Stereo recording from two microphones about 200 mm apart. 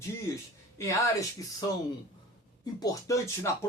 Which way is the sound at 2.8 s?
15° left (ahead or behind).